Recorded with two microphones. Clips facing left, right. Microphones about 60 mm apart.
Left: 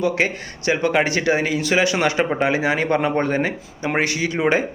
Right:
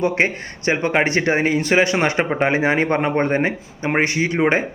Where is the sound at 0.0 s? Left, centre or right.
Right.